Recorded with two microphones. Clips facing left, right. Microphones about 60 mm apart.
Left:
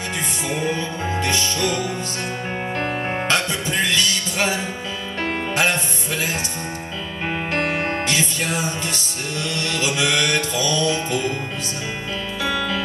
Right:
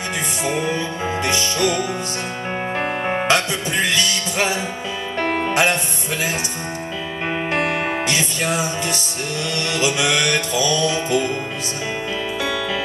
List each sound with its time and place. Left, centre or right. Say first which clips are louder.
0.5 s music: right 2 dB; centre
7.5 s music: right 1 dB; centre